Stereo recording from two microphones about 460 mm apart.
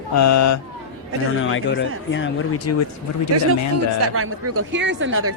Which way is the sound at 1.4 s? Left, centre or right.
Left.